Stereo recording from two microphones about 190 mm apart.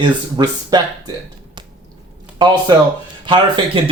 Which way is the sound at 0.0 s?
25° right (ahead or behind).